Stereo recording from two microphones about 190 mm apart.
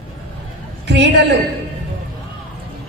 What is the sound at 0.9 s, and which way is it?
Speech, 65° right (ahead or behind).